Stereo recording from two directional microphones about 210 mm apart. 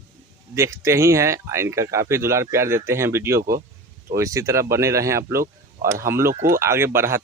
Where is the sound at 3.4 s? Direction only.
45° right (ahead or behind).